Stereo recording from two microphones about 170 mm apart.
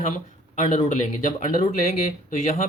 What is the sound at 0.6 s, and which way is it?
Speech, 40° left (ahead or behind).